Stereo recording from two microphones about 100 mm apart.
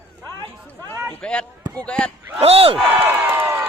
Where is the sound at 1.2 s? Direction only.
10° left (ahead or behind).